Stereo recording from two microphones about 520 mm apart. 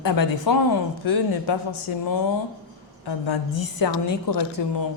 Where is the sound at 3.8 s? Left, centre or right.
Left.